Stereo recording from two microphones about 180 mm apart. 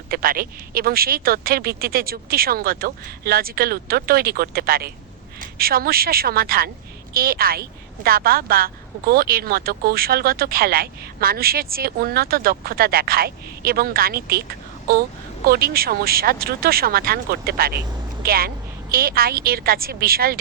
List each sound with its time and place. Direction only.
0.1 s a woman's voice: 55° right (ahead or behind)